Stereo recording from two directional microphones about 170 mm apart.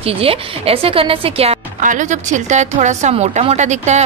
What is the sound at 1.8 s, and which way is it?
A woman's voice, 50° right (ahead or behind).